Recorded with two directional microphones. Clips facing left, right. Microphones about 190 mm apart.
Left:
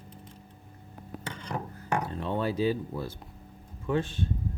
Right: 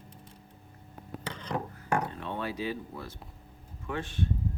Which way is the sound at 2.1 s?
35° left (ahead or behind).